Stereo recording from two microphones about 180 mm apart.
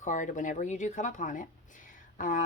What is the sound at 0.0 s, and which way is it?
Speech, 45° left (ahead or behind).